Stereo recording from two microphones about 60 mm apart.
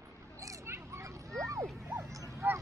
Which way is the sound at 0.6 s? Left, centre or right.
Right.